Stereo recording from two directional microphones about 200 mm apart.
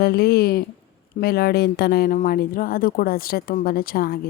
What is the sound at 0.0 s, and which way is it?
Speech, 50° left (ahead or behind).